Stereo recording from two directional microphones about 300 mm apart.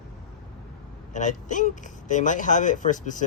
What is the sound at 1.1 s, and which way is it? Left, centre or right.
Speech, left.